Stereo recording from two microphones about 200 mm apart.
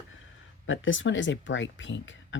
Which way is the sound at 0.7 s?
75° left (ahead or behind).